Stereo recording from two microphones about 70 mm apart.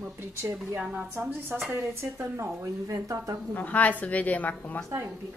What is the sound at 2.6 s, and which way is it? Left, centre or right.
Speech, right.